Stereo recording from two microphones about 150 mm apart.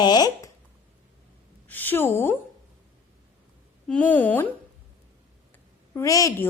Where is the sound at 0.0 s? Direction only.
25° left (ahead or behind).